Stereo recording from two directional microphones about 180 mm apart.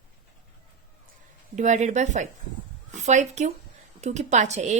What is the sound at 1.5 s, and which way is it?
A woman's voice, 40° right (ahead or behind).